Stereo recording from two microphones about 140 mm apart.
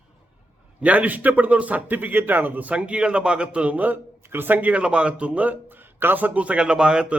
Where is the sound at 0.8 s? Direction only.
10° right (ahead or behind).